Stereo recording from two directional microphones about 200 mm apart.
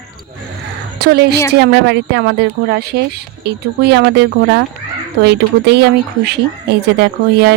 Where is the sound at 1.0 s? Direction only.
55° right (ahead or behind).